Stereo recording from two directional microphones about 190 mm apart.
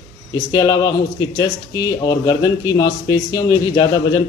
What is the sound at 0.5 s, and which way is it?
Speech, 20° left (ahead or behind).